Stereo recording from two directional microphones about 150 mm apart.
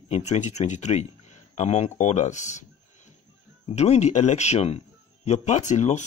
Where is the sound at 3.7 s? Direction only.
50° left (ahead or behind).